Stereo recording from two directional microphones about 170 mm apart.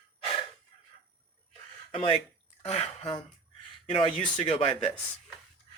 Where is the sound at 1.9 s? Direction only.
30° left (ahead or behind).